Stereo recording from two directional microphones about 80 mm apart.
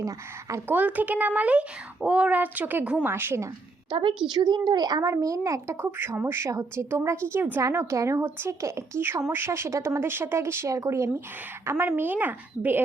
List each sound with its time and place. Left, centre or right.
0.0 s speech: right
0.7 s speech: right
3.8 s a woman's voice: right
4.3 s a child's voice: right
5.0 s speech: right
6.1 s speech: right